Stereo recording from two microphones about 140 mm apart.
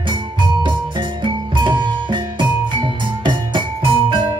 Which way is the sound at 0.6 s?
35° right (ahead or behind).